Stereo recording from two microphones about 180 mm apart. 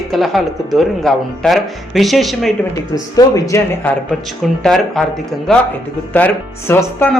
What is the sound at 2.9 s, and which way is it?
Speech, 20° left (ahead or behind).